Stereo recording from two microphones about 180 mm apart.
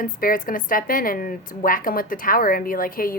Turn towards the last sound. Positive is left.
turn(degrees=55)  # may be behind; listen again after turning